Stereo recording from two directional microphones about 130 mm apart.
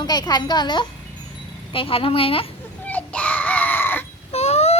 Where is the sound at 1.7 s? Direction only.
45° left (ahead or behind).